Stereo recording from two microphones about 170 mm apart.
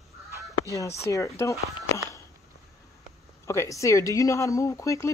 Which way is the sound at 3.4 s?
15° left (ahead or behind).